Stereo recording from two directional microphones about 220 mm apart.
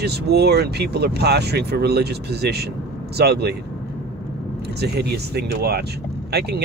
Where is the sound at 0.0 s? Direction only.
50° right (ahead or behind).